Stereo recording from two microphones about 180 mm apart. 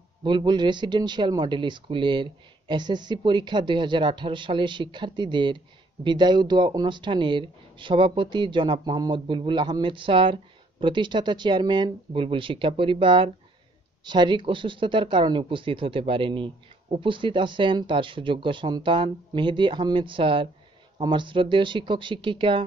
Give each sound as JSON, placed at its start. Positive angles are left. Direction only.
{"t": 0.2, "sound": "speech", "side_deg": -25}